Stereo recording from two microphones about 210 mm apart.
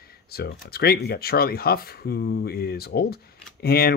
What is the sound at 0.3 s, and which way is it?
Speech, 50° left (ahead or behind).